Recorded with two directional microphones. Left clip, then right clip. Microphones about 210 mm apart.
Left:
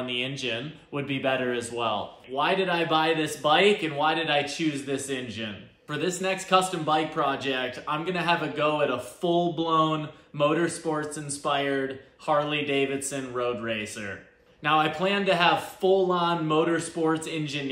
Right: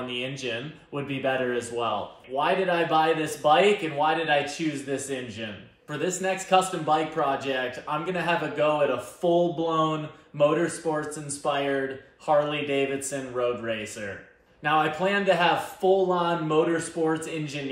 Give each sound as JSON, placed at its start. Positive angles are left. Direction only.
{"t": 0.4, "sound": "a man's voice", "side_deg": 15}
{"t": 14.6, "sound": "a man's voice", "side_deg": 15}